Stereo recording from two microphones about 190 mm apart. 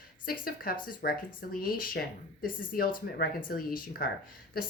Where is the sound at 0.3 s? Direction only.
50° left (ahead or behind).